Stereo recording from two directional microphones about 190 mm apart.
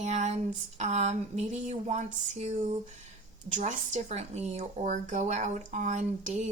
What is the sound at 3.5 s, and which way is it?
Speech, 40° right (ahead or behind).